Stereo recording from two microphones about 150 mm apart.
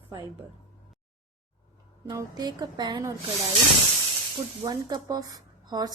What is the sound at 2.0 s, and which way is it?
A woman's voice, 25° right (ahead or behind).